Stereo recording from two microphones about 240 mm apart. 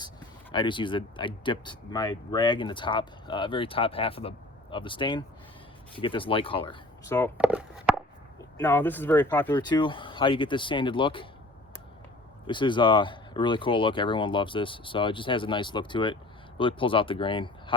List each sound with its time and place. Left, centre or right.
0.5 s speech: centre
7.3 s walk: centre
8.5 s speech: centre
12.5 s speech: centre